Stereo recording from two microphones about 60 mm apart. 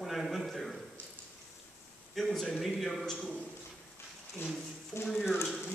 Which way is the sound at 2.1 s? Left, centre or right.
Centre.